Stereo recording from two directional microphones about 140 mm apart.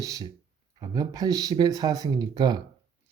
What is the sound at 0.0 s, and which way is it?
Speech, 25° right (ahead or behind).